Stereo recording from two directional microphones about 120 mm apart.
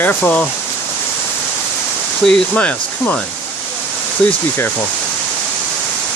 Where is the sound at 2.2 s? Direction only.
10° left (ahead or behind).